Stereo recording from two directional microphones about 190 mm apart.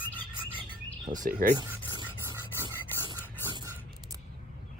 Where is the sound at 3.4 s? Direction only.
20° right (ahead or behind).